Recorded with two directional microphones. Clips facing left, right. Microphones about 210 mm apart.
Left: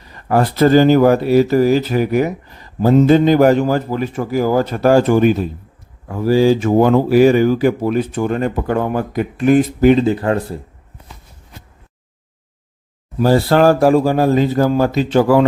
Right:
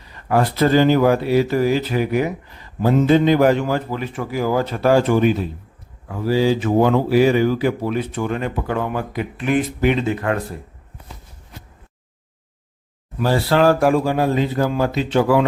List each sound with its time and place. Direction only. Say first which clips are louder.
0.3 s speech: left 4 dB; 45° left (ahead or behind)
13.1 s speech: left 5 dB; 40° left (ahead or behind)